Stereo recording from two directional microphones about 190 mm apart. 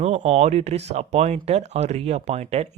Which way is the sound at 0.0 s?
35° right (ahead or behind).